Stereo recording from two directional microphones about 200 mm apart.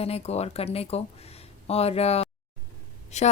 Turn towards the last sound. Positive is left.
turn(degrees=35)  # may be behind; listen again after turning